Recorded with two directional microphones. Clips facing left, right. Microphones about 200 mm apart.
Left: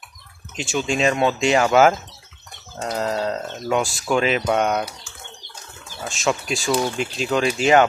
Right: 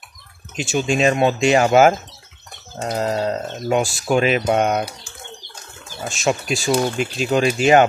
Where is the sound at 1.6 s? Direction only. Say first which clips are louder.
Right 1 dB; 25° right (ahead or behind).